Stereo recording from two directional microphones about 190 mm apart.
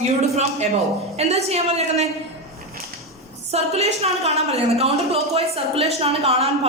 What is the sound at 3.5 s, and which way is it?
A woman's voice, 35° right (ahead or behind).